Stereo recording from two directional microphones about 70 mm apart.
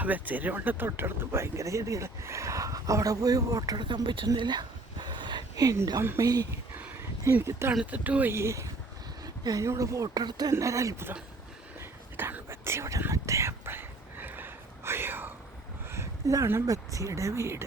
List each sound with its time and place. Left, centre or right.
0.0 s speech: right
6.0 s speech: right
6.2 s speech: right
7.3 s speech: right
7.9 s speech: right
8.3 s speech: right
9.2 s a sound: right
9.6 s speech: right
10.2 s speech: right
10.5 s speech: right
11.8 s whispering: right
13.7 s whispering: right
16.2 s speech: right